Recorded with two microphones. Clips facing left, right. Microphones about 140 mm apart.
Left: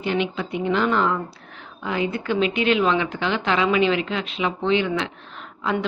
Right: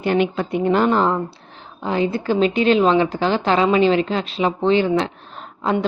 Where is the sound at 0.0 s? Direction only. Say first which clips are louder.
Right 5 dB; 50° right (ahead or behind).